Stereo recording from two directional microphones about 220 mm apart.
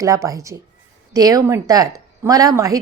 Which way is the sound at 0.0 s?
15° right (ahead or behind).